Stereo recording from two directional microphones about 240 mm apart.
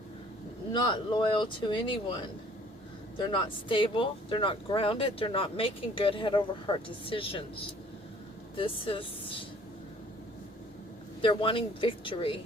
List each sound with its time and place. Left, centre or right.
0.7 s speech: centre
3.2 s speech: centre
8.5 s speech: left
11.2 s speech: left